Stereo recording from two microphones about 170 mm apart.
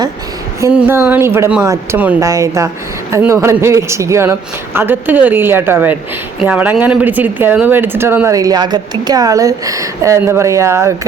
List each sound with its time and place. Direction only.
0.7 s speech: 10° right (ahead or behind)